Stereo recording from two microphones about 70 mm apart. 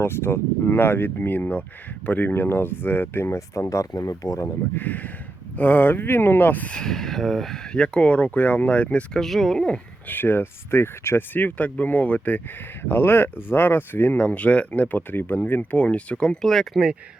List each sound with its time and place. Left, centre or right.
0.0 s speech: left
3.3 s speech: left
4.7 s speech: left
6.7 s speech: centre
10.1 s speech: left; by 16.8 s centre